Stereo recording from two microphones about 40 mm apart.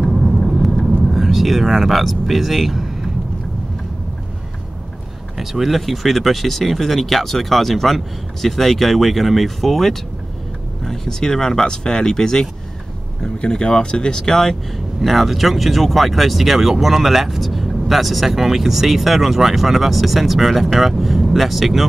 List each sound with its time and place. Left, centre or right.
0.1 s vehicle: centre
1.0 s speech: centre
5.4 s speech: centre
15.0 s speech: centre